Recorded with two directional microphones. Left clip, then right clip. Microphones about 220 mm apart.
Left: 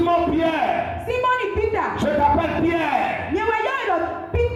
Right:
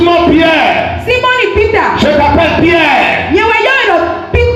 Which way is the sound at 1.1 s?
50° right (ahead or behind).